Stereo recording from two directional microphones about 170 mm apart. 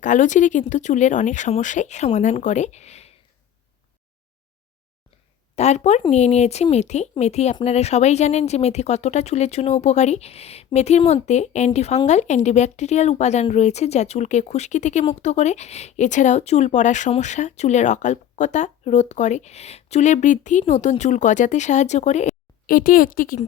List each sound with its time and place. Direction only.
0.0 s speech: 45° left (ahead or behind)
5.5 s speech: 40° left (ahead or behind)